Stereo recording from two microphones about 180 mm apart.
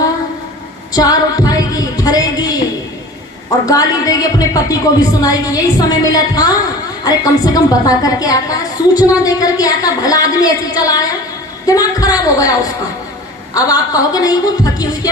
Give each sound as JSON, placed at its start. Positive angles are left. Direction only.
{"t": 0.9, "sound": "music", "side_deg": 20}
{"t": 3.7, "sound": "a woman's voice", "side_deg": 20}